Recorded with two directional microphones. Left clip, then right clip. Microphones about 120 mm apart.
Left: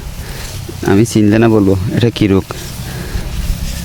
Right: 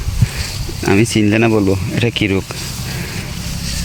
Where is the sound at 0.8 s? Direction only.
35° left (ahead or behind); by 2.4 s 70° left (ahead or behind).